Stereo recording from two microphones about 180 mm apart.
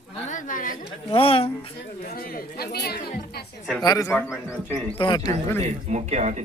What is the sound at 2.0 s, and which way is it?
Chatter, 55° left (ahead or behind).